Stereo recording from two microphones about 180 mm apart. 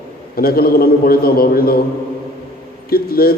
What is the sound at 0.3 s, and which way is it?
A man's voice, 55° left (ahead or behind).